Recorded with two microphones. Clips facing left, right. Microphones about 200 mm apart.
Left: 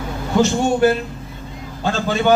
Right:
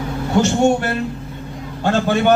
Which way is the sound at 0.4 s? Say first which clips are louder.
Left 2 dB; 65° right (ahead or behind).